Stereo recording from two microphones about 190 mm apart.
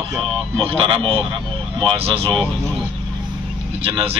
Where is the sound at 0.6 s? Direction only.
25° right (ahead or behind).